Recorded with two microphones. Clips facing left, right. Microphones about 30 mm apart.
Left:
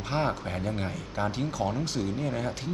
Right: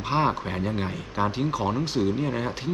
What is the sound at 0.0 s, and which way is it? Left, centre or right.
Speech, centre.